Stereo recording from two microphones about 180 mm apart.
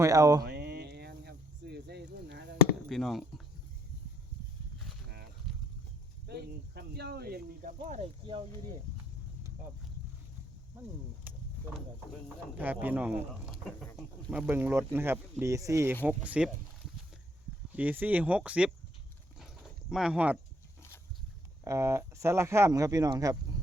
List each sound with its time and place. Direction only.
0.0 s speech: 20° right (ahead or behind)
0.4 s a sound: 65° right (ahead or behind)
2.9 s speech: centre (ahead or behind)
5.5 s a sound: centre (ahead or behind)
6.2 s a sound: 65° right (ahead or behind); by 8.0 s 45° right (ahead or behind)
12.5 s speech: 10° right (ahead or behind)
14.3 s speech: 10° right (ahead or behind)
17.7 s speech: 10° right (ahead or behind)
19.9 s speech: 5° right (ahead or behind)
21.6 s speech: 15° right (ahead or behind)